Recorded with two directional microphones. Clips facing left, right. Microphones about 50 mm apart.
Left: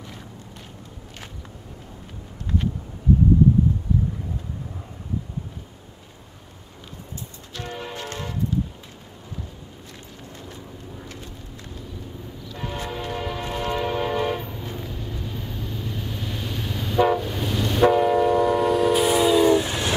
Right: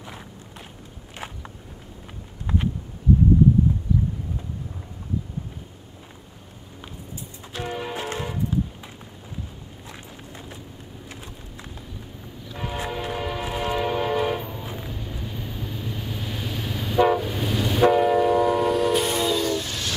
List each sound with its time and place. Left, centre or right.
7.5 s a sound: centre
12.4 s train: centre
19.3 s train: centre